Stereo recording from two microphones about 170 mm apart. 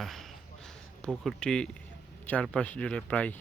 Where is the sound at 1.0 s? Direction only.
5° left (ahead or behind).